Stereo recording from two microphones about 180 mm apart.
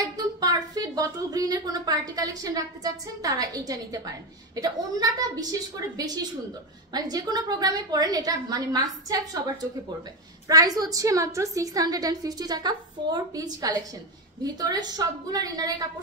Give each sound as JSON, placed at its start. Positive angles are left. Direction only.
{"t": 0.0, "sound": "a woman's voice", "side_deg": -20}